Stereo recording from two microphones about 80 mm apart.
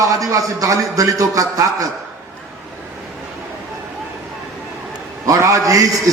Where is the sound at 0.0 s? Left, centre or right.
Right.